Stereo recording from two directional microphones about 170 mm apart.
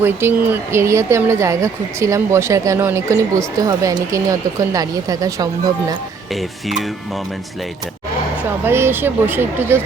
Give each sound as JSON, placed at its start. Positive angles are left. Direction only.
{"t": 0.0, "sound": "speech", "side_deg": -15}
{"t": 6.3, "sound": "speech", "side_deg": 0}
{"t": 8.6, "sound": "speech", "side_deg": -15}